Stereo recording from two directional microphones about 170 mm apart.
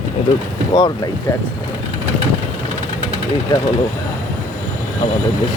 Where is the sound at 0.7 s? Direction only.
25° left (ahead or behind).